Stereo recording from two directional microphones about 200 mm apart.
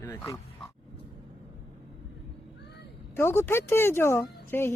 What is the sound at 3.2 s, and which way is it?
Speech, 10° left (ahead or behind).